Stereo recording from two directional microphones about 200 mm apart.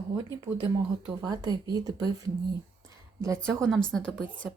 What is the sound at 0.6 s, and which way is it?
Speech, 20° right (ahead or behind).